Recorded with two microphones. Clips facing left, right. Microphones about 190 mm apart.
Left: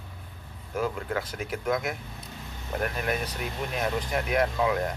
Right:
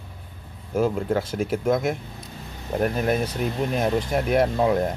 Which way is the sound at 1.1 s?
25° right (ahead or behind).